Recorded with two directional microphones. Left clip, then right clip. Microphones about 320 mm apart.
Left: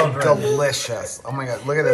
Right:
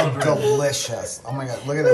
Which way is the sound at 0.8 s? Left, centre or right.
Centre.